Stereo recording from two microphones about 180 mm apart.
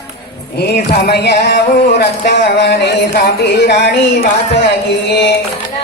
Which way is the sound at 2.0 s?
70° left (ahead or behind).